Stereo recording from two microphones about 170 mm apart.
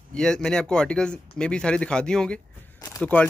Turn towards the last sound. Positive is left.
turn(degrees=20)  # may be behind; listen again after turning